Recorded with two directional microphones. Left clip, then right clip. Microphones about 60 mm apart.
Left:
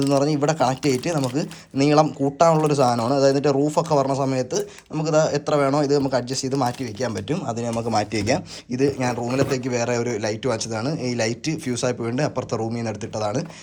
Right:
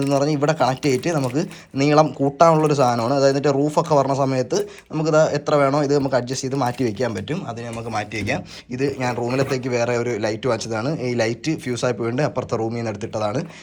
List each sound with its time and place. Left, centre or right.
0.1 s speech: left
7.9 s speech: left
8.8 s speech: left
9.1 s speech: left